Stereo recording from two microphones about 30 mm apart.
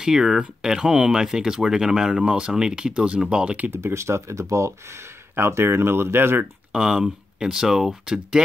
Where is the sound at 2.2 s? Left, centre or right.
Right.